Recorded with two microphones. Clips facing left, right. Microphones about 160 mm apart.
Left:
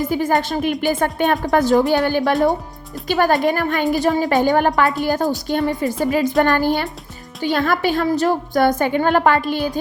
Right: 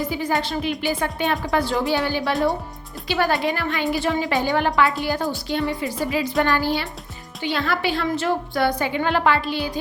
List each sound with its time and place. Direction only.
0.0 s a woman's voice: 50° left (ahead or behind)